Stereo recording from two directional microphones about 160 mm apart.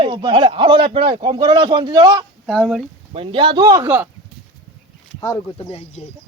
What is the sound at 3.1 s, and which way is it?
Speech, 35° right (ahead or behind).